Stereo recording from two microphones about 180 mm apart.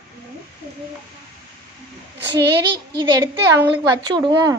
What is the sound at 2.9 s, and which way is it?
Speech, 25° right (ahead or behind).